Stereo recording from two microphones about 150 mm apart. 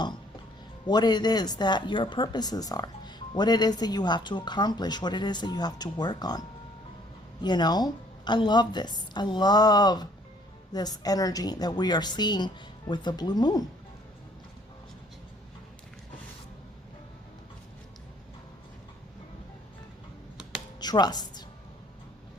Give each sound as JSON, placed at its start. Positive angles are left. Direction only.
{"t": 0.9, "sound": "speech", "side_deg": 30}
{"t": 7.4, "sound": "speech", "side_deg": 30}
{"t": 20.7, "sound": "speech", "side_deg": 30}